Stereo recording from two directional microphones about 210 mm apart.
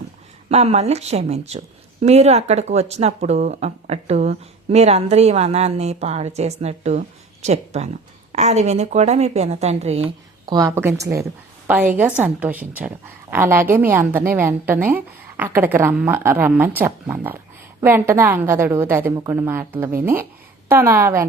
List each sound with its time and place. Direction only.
0.4 s a woman's voice: 30° right (ahead or behind); by 21.2 s 10° right (ahead or behind)